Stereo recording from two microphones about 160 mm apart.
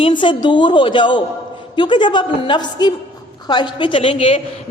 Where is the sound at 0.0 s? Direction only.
30° left (ahead or behind).